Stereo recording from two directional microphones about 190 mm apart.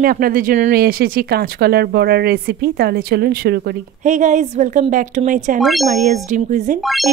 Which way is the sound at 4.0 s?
40° right (ahead or behind).